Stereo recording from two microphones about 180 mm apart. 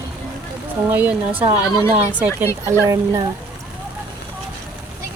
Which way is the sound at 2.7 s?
15° right (ahead or behind).